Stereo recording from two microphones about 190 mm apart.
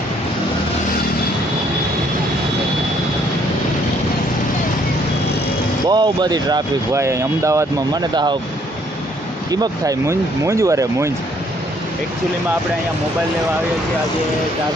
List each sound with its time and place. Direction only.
5.9 s speech: 20° right (ahead or behind)
9.5 s speech: 20° right (ahead or behind)